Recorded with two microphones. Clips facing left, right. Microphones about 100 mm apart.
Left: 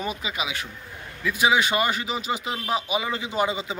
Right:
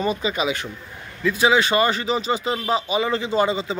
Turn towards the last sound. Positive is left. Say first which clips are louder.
# right 5 dB
turn(degrees=15)  # may be behind; listen again after turning